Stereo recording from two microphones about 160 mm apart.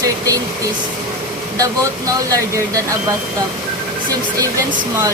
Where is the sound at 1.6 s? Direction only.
20° right (ahead or behind).